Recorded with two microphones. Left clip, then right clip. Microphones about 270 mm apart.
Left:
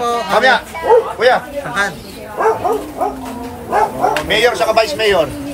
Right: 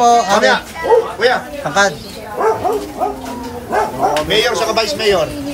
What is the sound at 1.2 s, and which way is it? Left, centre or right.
Speech, left.